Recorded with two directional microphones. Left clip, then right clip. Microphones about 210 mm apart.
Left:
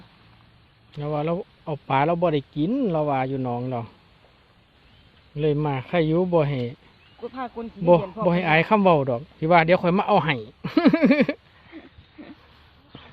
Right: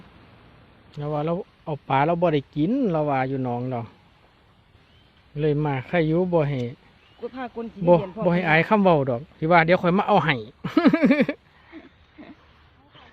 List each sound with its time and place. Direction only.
0.9 s speech: 10° right (ahead or behind)
5.4 s speech: 15° right (ahead or behind)
7.2 s speech: 55° right (ahead or behind)
7.9 s speech: 10° right (ahead or behind)